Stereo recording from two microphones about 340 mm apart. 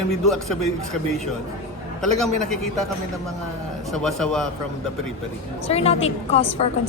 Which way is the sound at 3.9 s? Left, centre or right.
Centre.